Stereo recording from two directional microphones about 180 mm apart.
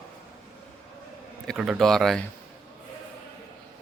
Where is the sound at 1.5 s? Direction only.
Centre (ahead or behind).